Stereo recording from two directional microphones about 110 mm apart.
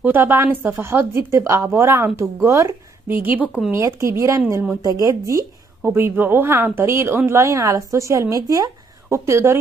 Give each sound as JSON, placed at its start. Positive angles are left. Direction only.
{"t": 0.0, "sound": "a woman's voice", "side_deg": -20}
{"t": 3.3, "sound": "speech", "side_deg": -10}
{"t": 3.7, "sound": "a woman's voice", "side_deg": -25}
{"t": 5.9, "sound": "a woman's voice", "side_deg": -20}